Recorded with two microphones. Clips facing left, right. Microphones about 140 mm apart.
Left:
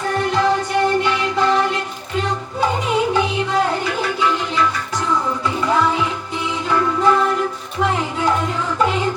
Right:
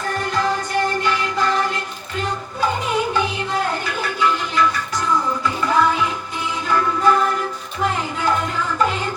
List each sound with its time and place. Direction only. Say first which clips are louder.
0.1 s music: left 4 dB; 25° left (ahead or behind)
5.6 s music: even; 25° left (ahead or behind)
8.8 s music: left 2 dB; 25° left (ahead or behind)